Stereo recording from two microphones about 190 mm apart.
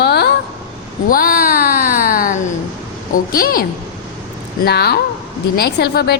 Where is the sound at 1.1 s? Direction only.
50° left (ahead or behind).